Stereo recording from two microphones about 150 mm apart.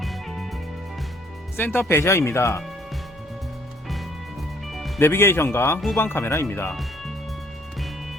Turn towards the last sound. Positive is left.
turn(degrees=15)  # may be behind; listen again after turning